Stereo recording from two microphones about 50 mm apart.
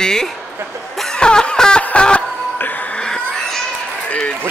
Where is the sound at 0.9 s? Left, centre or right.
Centre.